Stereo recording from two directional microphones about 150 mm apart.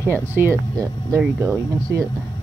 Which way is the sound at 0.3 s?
15° right (ahead or behind).